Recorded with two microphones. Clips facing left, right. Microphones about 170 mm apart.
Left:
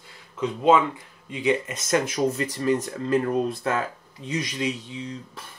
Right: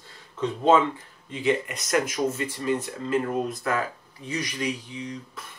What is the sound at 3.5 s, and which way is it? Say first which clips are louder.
Speech: left 1 dB; 30° left (ahead or behind).